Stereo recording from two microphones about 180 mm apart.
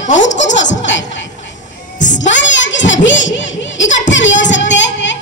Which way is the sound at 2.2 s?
90° left.